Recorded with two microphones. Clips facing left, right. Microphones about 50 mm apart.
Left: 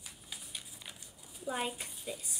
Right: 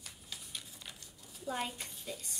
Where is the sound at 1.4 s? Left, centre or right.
Centre.